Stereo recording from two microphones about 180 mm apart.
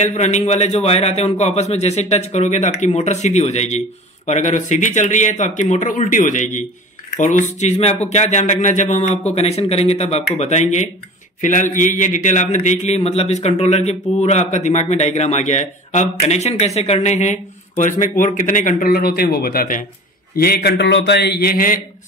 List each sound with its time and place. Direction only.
0.0 s a man's voice: 40° left (ahead or behind)